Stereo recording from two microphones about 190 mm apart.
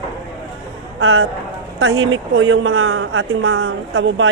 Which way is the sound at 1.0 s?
90° right.